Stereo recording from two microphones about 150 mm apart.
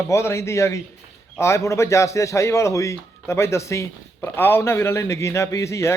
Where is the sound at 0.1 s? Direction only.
20° left (ahead or behind).